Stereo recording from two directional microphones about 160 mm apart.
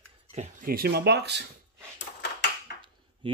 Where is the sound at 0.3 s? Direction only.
45° right (ahead or behind).